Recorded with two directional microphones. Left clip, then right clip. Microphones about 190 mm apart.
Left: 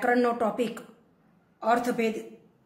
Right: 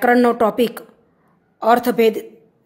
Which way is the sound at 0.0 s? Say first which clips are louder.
Right 10 dB; 40° right (ahead or behind).